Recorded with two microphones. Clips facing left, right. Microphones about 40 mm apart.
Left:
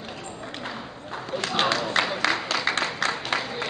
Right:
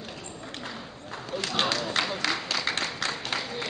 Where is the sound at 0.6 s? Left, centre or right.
Centre.